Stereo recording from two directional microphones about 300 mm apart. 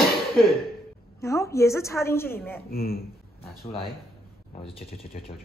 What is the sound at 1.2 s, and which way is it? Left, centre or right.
A woman's voice, centre.